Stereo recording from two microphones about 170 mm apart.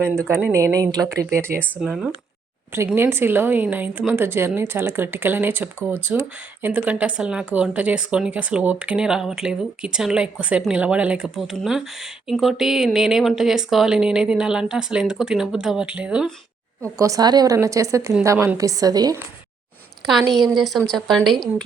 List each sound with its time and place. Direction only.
0.0 s speech: 15° right (ahead or behind)
1.8 s speech: centre (ahead or behind)
2.7 s speech: 15° right (ahead or behind)
17.0 s a woman's voice: 20° right (ahead or behind)
20.1 s speech: centre (ahead or behind)